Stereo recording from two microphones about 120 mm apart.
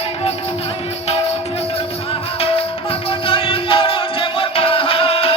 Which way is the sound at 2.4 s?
50° left (ahead or behind).